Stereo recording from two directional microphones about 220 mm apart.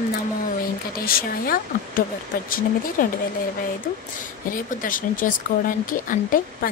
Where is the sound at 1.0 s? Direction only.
40° left (ahead or behind).